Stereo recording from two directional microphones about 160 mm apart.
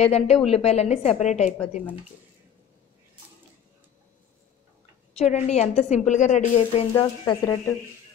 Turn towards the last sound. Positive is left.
turn(degrees=20)  # may be behind; listen again after turning